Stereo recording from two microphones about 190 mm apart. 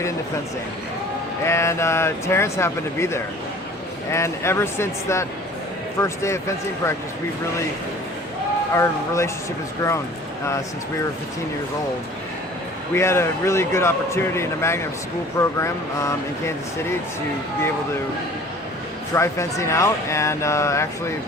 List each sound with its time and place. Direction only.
1.5 s speech: 15° left (ahead or behind)
8.7 s speech: 15° left (ahead or behind)
12.9 s speech: 15° left (ahead or behind)
19.1 s speech: 15° left (ahead or behind)